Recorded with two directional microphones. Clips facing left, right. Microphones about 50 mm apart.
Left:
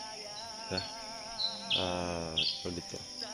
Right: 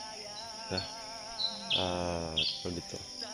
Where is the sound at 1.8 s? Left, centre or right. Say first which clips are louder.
Right 1 dB; centre.